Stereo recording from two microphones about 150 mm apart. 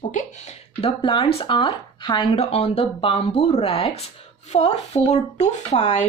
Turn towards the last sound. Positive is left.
turn(degrees=50)  # may be behind; listen again after turning